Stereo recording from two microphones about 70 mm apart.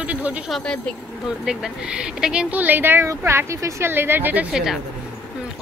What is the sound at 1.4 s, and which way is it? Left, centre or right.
A woman's voice, centre.